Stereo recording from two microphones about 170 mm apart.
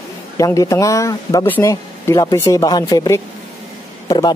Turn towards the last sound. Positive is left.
turn(degrees=25)  # may be behind; listen again after turning